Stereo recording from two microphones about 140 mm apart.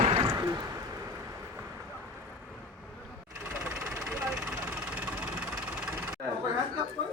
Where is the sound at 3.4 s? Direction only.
20° right (ahead or behind).